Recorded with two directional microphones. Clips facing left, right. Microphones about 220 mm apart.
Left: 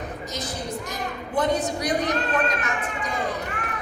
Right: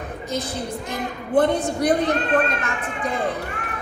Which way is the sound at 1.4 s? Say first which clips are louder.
Right 5 dB; 55° right (ahead or behind).